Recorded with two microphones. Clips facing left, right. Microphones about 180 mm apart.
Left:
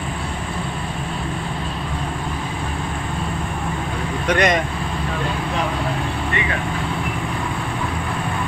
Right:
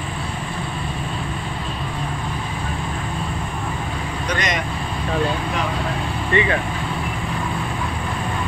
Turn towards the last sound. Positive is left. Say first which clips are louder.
# right 5 dB
turn(degrees=-30)  # may be behind; listen again after turning